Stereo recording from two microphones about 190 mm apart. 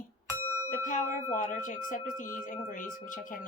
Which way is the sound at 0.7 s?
45° left (ahead or behind).